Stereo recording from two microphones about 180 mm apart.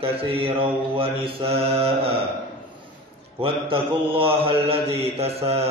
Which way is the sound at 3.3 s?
30° right (ahead or behind).